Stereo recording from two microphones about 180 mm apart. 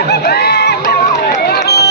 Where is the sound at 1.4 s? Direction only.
65° left (ahead or behind).